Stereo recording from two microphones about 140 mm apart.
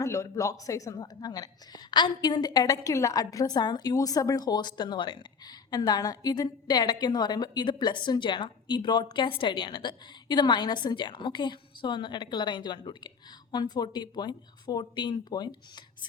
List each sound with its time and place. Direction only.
0.0 s a woman's voice: 20° left (ahead or behind)